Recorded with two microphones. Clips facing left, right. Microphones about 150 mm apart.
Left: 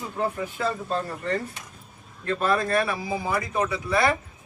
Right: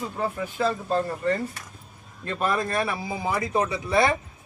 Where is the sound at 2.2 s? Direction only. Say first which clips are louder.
Left 2 dB; 20° right (ahead or behind).